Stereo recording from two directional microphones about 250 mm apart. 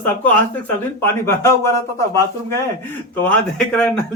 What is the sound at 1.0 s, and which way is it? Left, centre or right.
Speech, centre.